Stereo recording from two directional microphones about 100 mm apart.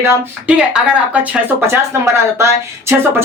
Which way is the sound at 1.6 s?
25° right (ahead or behind).